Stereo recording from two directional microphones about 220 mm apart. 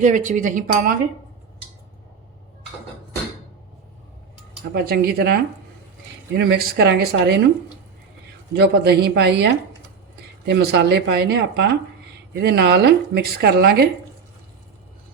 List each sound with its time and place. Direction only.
0.0 s speech: 35° right (ahead or behind)
4.7 s speech: 45° right (ahead or behind)
8.5 s speech: 45° right (ahead or behind)